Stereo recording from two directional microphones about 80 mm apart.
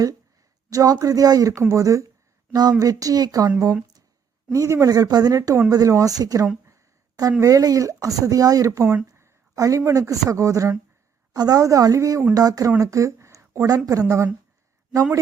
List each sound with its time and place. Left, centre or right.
0.7 s speech: right
1.5 s speech: right
4.5 s speech: right
6.7 s a sound: right
7.4 s speech: right